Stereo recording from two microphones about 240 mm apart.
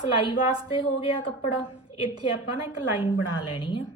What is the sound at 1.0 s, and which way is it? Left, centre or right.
Speech, left.